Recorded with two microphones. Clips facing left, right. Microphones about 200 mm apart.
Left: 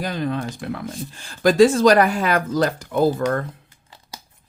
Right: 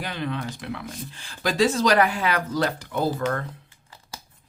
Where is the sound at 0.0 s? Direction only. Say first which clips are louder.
Left 5 dB; 40° left (ahead or behind).